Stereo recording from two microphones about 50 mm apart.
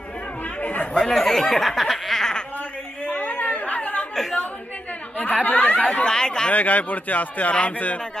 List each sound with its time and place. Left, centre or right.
0.6 s chatter: left
0.9 s speech: centre
3.1 s chatter: left
4.1 s a sound: centre
5.1 s speech: left
6.0 s speech: centre
6.5 s speech: left